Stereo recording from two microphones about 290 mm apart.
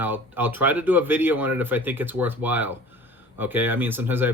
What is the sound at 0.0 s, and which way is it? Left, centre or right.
Speech, centre.